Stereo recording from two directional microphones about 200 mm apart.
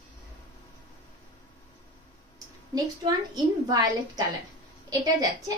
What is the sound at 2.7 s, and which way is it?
A woman's voice, 20° right (ahead or behind).